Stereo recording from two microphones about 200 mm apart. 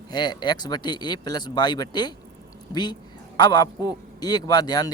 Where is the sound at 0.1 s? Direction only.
20° left (ahead or behind).